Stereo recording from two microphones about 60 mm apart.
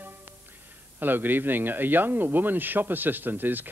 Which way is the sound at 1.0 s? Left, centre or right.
Right.